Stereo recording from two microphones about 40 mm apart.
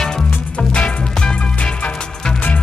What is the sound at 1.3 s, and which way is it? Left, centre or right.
Music, left.